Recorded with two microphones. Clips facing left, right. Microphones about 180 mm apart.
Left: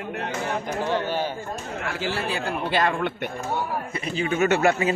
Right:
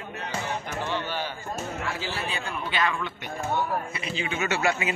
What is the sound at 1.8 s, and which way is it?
Speech, 65° left (ahead or behind).